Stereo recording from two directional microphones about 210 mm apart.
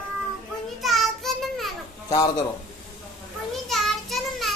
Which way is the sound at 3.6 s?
Centre (ahead or behind).